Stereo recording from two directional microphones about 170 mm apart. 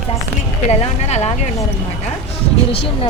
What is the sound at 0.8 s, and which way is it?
Speech, 40° left (ahead or behind).